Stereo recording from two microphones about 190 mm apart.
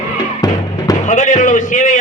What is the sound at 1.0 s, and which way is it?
Speech, 45° left (ahead or behind).